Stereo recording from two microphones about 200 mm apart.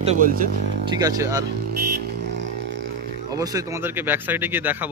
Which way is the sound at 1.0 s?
15° right (ahead or behind).